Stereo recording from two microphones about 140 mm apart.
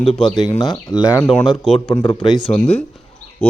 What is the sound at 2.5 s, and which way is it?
Speech, 40° left (ahead or behind).